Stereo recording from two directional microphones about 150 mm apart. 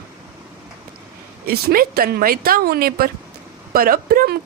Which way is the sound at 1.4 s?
85° right.